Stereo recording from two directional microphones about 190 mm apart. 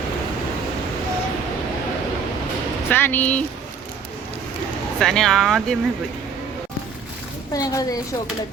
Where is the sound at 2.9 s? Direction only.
10° left (ahead or behind).